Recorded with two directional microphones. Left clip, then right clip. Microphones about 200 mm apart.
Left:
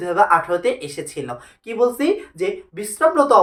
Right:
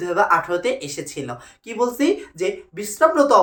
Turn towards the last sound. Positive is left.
turn(degrees=0)  # may be behind; listen again after turning